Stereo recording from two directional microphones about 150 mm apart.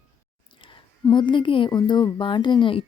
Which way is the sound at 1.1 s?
30° left (ahead or behind).